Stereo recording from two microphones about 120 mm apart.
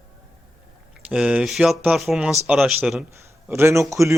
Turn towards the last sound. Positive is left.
turn(degrees=-25)  # may be behind; listen again after turning